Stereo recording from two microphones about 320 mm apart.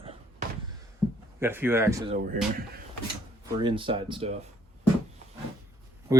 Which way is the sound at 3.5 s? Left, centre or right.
Centre.